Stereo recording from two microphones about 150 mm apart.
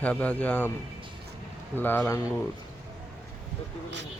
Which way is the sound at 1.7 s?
15° left (ahead or behind).